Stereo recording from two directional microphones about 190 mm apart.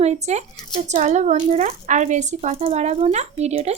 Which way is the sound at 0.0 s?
35° right (ahead or behind).